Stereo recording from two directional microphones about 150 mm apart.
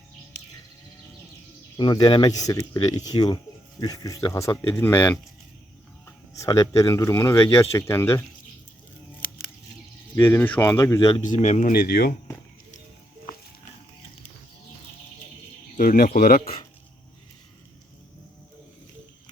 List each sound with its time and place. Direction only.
1.7 s speech: 30° left (ahead or behind)
6.4 s speech: 20° left (ahead or behind)
10.2 s speech: 15° left (ahead or behind)
11.2 s speech: 50° left (ahead or behind)
11.7 s speech: 90° left
15.7 s a man's voice: 65° left (ahead or behind)